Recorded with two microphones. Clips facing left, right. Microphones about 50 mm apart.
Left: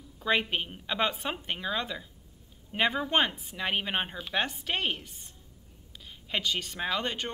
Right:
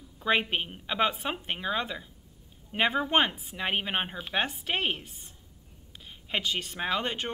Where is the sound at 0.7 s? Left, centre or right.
Centre.